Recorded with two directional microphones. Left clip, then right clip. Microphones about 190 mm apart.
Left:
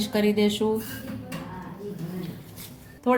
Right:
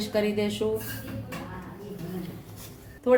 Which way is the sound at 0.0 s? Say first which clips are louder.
Left 3 dB; 45° left (ahead or behind).